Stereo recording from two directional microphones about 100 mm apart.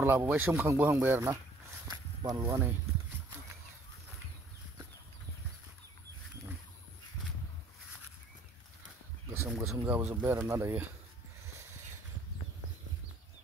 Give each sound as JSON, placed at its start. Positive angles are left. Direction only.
{"t": 0.0, "sound": "speech", "side_deg": -20}
{"t": 1.9, "sound": "a sound", "side_deg": -40}
{"t": 9.5, "sound": "speech", "side_deg": -5}
{"t": 9.8, "sound": "speech", "side_deg": -20}